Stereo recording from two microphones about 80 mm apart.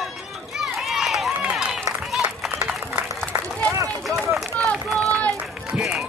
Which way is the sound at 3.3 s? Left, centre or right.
Right.